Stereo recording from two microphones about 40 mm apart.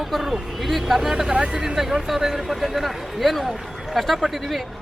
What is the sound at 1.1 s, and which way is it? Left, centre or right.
Speech, right.